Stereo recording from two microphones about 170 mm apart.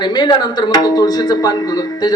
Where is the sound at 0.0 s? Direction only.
25° left (ahead or behind).